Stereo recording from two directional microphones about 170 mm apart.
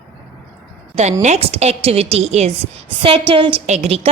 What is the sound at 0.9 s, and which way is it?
A woman's voice, 40° right (ahead or behind).